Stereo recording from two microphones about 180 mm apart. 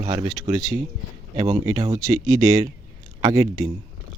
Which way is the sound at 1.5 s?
25° right (ahead or behind).